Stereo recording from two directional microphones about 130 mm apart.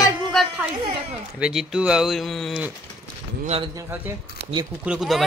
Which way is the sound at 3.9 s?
15° right (ahead or behind).